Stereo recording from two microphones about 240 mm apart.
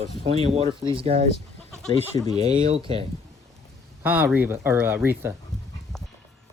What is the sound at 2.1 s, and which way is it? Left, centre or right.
Speech, centre.